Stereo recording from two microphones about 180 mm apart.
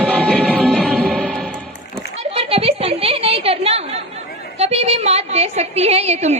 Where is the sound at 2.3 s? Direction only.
35° right (ahead or behind).